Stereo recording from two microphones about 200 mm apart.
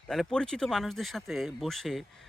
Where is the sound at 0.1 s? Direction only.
5° left (ahead or behind).